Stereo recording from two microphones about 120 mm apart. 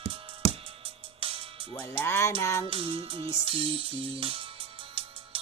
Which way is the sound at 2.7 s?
50° right (ahead or behind).